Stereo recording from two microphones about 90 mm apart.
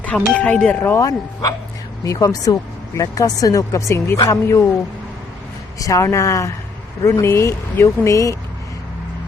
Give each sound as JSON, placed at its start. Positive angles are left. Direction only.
{"t": 0.0, "sound": "speech", "side_deg": 15}
{"t": 0.8, "sound": "speech", "side_deg": 25}
{"t": 1.0, "sound": "speech", "side_deg": 40}
{"t": 5.8, "sound": "speech", "side_deg": 35}